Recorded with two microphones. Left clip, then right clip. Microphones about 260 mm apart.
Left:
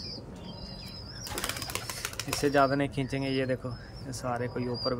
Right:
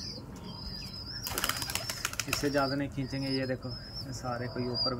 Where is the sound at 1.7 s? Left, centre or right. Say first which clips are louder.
Right 1 dB; centre.